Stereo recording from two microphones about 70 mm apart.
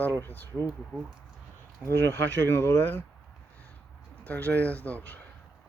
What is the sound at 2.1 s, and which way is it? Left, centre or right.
Speech, left.